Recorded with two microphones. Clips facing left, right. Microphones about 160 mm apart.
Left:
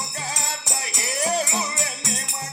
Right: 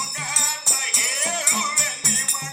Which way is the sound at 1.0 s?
35° left (ahead or behind).